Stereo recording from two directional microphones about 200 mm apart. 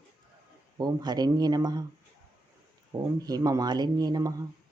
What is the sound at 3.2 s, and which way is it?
Speech, 20° right (ahead or behind).